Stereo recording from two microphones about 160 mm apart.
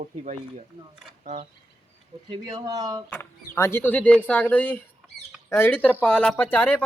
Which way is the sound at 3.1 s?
15° left (ahead or behind).